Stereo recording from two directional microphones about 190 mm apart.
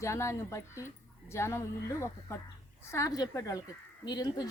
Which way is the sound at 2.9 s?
15° left (ahead or behind).